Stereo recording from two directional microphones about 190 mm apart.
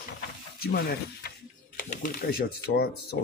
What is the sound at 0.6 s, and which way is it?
Speech, 55° left (ahead or behind).